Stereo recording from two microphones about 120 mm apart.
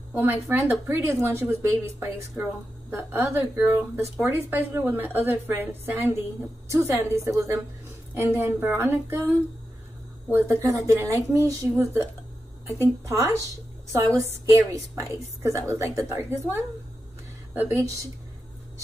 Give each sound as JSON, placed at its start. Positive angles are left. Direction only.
{"t": 0.1, "sound": "a woman's voice", "side_deg": -15}
{"t": 14.7, "sound": "a woman's voice", "side_deg": -25}